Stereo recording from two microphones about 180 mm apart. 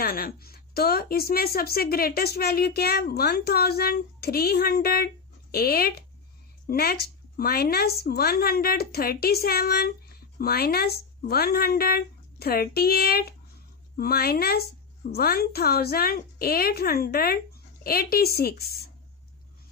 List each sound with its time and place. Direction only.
0.0 s a woman's voice: 55° left (ahead or behind)